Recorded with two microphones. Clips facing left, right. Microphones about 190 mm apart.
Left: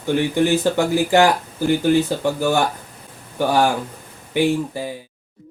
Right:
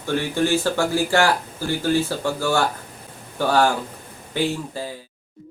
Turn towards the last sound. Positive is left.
turn(degrees=15)  # may be behind; listen again after turning